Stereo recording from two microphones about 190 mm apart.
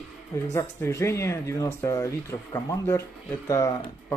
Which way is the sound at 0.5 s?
15° left (ahead or behind).